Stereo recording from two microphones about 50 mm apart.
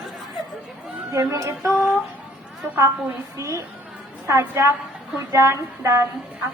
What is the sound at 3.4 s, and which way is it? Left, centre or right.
Speech, right.